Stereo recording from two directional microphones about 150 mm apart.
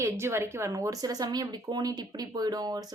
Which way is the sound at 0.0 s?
15° right (ahead or behind).